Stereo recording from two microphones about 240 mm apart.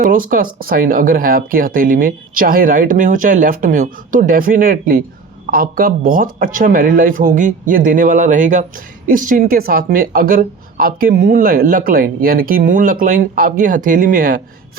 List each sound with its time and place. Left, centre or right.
0.0 s speech: right